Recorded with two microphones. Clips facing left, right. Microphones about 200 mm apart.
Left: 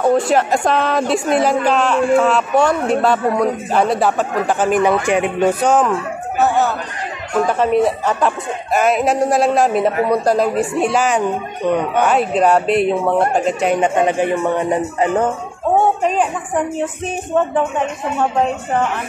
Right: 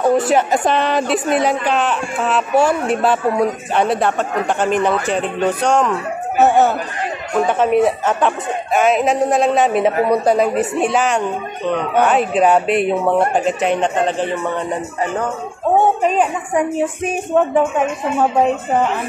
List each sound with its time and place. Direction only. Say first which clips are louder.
0.0 s speech: even; centre (ahead or behind)
6.4 s speech: right 3 dB; 25° right (ahead or behind)
7.4 s speech: right 1 dB; centre (ahead or behind)
16.0 s a woman's voice: right 1 dB; 5° right (ahead or behind)